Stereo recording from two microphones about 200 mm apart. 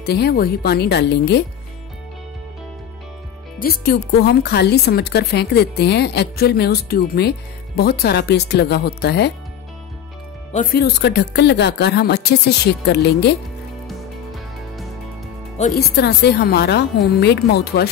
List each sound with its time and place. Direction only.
0.0 s speech: 55° left (ahead or behind)
3.5 s speech: 50° left (ahead or behind)
10.5 s speech: 45° left (ahead or behind)
13.8 s music: centre (ahead or behind)
15.7 s speech: 55° left (ahead or behind)